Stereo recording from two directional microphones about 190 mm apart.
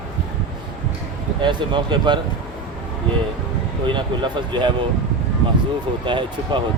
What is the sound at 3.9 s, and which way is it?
Speech, 25° right (ahead or behind).